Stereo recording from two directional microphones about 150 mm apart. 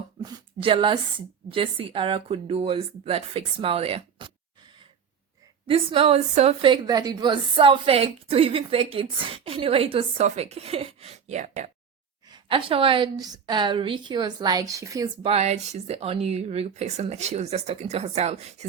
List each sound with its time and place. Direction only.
0.2 s a sound: 35° right (ahead or behind)
1.5 s a woman's voice: 35° right (ahead or behind)
12.3 s a woman's voice: 35° right (ahead or behind)
15.2 s speech: 45° right (ahead or behind)